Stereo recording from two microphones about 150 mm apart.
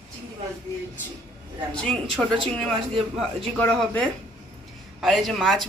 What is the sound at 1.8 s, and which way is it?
Speech, 5° left (ahead or behind).